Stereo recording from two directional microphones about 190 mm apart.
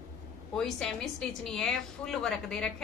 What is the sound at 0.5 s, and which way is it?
A woman's voice, 5° left (ahead or behind).